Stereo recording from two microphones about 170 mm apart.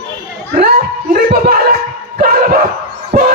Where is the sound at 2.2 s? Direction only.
60° right (ahead or behind).